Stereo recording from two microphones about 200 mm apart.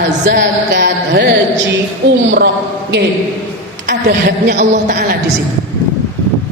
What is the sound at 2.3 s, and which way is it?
Speech, 60° right (ahead or behind).